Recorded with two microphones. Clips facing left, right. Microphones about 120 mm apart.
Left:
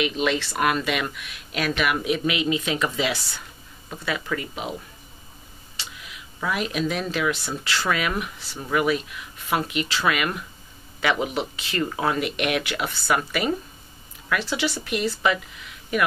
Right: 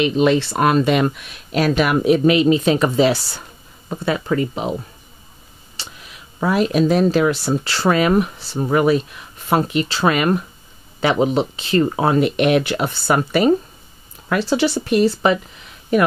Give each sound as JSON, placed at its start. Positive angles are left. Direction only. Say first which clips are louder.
{"t": 0.0, "sound": "speech", "louder": "right 8 dB", "side_deg": -30}
{"t": 5.8, "sound": "speech", "louder": "right 2 dB", "side_deg": -40}